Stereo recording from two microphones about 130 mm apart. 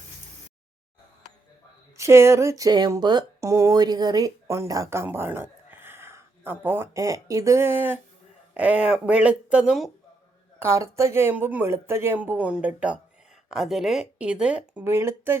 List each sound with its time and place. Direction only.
2.0 s speech: 20° right (ahead or behind); by 9.9 s 5° right (ahead or behind)
10.6 s speech: 20° right (ahead or behind)